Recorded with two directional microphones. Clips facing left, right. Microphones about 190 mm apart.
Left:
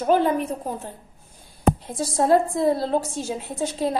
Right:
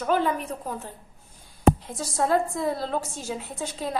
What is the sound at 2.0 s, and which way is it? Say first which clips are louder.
A woman's voice: left 5 dB; 35° left (ahead or behind).